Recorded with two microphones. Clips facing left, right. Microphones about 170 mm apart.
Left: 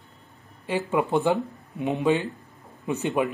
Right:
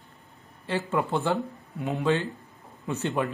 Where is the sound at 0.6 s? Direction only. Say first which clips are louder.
Left 3 dB; 15° left (ahead or behind).